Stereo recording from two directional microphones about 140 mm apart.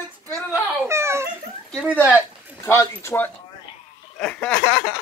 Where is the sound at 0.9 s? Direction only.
20° right (ahead or behind).